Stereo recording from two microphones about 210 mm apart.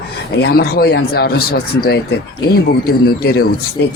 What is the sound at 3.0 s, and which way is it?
Speech, 50° left (ahead or behind).